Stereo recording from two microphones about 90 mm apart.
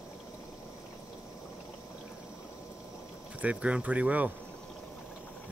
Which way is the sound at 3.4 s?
15° right (ahead or behind).